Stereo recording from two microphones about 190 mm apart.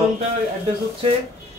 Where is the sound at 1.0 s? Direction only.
30° right (ahead or behind).